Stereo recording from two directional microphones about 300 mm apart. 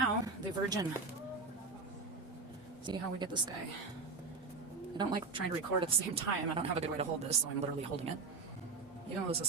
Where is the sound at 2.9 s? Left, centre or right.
Centre.